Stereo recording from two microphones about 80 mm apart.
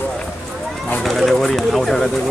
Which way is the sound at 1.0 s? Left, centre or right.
Centre.